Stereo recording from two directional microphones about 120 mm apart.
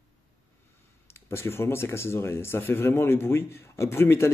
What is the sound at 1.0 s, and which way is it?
Speech, 20° left (ahead or behind).